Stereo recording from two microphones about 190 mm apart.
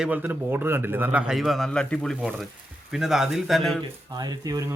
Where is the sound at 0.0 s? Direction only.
5° right (ahead or behind).